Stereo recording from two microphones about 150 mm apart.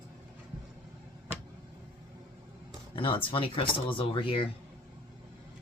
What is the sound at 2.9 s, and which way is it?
Music, 35° left (ahead or behind).